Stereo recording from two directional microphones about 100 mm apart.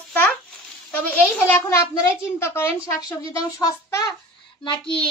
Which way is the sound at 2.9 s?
40° left (ahead or behind).